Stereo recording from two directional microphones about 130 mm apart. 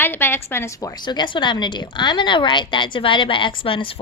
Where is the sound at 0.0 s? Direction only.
15° left (ahead or behind).